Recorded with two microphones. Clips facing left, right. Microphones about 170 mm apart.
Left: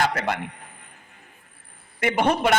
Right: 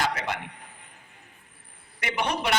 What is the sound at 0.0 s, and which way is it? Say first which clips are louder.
Speech: left 5 dB; 55° left (ahead or behind).